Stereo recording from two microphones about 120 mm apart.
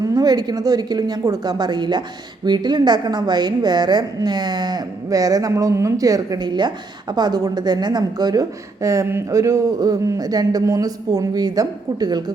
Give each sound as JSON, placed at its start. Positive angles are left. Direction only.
{"t": 0.0, "sound": "a woman's voice", "side_deg": -30}